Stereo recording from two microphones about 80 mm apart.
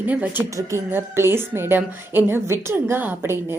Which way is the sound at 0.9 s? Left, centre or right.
Right.